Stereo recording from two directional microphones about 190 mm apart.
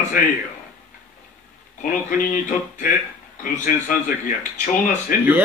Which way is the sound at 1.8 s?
40° left (ahead or behind).